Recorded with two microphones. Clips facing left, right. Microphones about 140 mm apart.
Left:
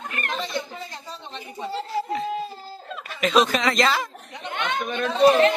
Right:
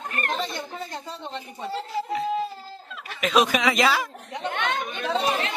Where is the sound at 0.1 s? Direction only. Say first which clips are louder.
Even; 45° right (ahead or behind).